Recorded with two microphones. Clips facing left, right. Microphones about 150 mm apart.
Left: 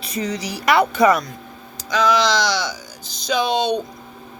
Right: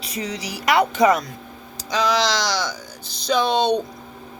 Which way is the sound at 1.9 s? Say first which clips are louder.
Left 3 dB; 35° right (ahead or behind).